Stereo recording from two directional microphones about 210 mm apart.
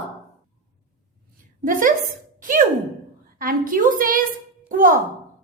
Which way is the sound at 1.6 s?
40° right (ahead or behind).